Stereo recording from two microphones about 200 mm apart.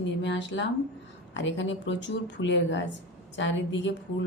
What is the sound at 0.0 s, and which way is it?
A woman's voice, 65° left (ahead or behind).